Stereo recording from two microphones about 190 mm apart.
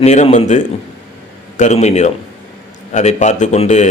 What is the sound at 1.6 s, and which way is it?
Speech, 35° left (ahead or behind).